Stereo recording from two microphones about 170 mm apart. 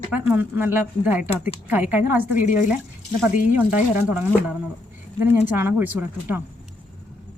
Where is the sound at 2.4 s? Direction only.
50° left (ahead or behind).